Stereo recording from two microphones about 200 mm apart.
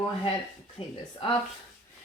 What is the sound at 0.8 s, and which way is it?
Speech, 30° left (ahead or behind).